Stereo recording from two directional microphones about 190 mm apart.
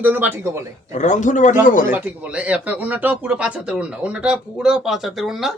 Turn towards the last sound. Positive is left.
turn(degrees=0)  # may be behind; listen again after turning